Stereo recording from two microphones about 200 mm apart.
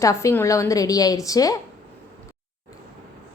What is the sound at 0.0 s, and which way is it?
A woman's voice, 15° left (ahead or behind).